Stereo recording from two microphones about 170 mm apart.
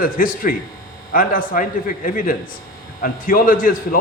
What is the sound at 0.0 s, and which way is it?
A man's voice, 55° left (ahead or behind).